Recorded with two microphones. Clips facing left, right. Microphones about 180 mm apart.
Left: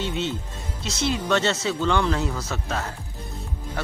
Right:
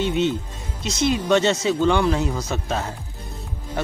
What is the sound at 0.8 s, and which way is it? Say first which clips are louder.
Speech: right 4 dB; 15° right (ahead or behind).